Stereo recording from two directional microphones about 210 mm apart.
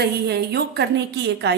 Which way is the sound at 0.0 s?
50° right (ahead or behind).